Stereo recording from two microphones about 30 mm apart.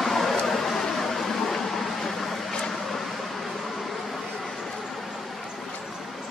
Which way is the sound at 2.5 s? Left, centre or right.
Left.